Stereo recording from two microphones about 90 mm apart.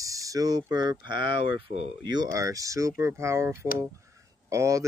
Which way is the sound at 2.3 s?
40° right (ahead or behind).